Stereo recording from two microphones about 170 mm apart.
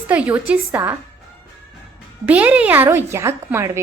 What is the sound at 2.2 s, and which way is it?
A woman's voice, 10° right (ahead or behind).